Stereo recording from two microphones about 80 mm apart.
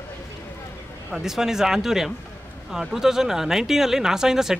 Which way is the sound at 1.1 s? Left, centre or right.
Centre.